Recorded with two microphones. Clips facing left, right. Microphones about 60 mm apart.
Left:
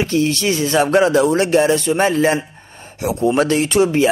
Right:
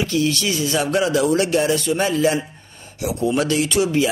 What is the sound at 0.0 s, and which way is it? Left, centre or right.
Speech, left.